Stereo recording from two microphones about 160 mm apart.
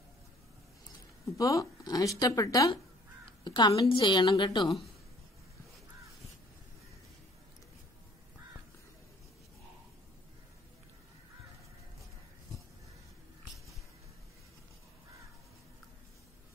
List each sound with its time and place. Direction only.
1.4 s a woman's voice: 20° left (ahead or behind)